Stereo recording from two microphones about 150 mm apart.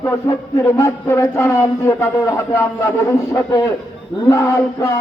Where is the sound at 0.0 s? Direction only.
20° left (ahead or behind).